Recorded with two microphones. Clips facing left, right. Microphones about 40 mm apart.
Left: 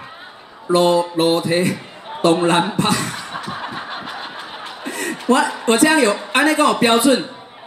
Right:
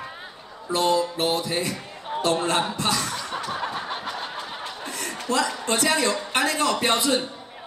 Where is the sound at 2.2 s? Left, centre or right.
Left.